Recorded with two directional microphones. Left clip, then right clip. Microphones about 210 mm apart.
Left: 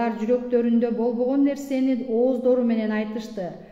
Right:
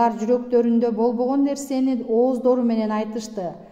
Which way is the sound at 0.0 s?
40° right (ahead or behind).